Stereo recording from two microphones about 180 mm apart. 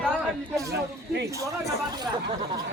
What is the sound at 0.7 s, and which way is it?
Speech, 65° right (ahead or behind).